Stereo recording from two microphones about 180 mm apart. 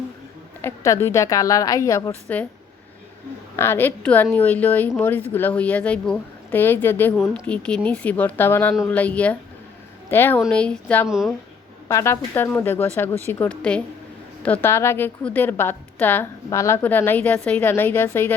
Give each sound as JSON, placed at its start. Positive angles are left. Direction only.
{"t": 0.6, "sound": "a woman's voice", "side_deg": 15}
{"t": 3.5, "sound": "a woman's voice", "side_deg": 15}
{"t": 11.1, "sound": "speech", "side_deg": -5}
{"t": 11.9, "sound": "a woman's voice", "side_deg": 15}